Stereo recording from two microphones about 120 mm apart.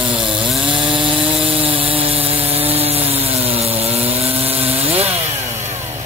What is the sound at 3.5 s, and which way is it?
Sawing, 55° right (ahead or behind).